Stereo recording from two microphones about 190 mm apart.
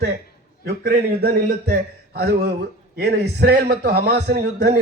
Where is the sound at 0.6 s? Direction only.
55° right (ahead or behind).